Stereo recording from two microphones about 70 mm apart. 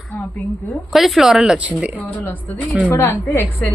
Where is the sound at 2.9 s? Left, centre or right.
Left.